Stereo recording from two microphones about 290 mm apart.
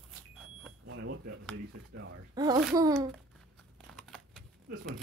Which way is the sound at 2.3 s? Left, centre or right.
Centre.